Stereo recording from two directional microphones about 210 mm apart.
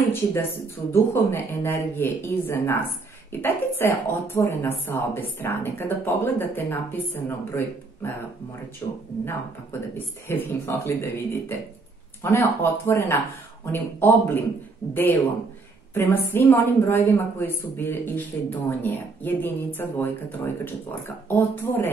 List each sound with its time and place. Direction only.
0.1 s a woman's voice: 10° left (ahead or behind)
15.9 s a woman's voice: 10° left (ahead or behind)